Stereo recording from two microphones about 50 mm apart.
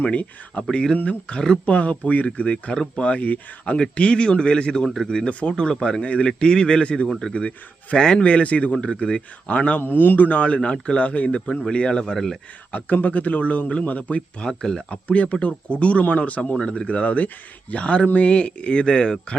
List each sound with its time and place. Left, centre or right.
0.0 s speech: left
0.9 s a man's voice: left
7.1 s a man's voice: centre; by 9.8 s left
9.8 s speech: left; by 12.4 s centre
12.7 s speech: left
14.4 s a man's voice: centre
14.8 s speech: left